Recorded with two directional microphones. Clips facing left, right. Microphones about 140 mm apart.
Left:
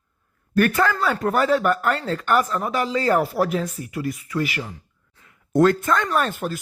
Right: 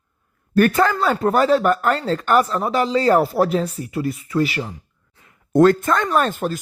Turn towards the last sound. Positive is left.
turn(degrees=-35)  # may be behind; listen again after turning